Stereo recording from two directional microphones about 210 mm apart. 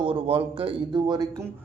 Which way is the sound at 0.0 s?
25° right (ahead or behind).